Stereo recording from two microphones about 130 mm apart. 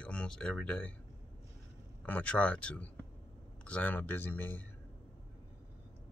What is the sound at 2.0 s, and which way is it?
Speech, 10° left (ahead or behind).